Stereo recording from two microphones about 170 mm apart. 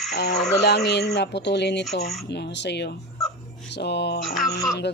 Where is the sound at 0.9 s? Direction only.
80° left.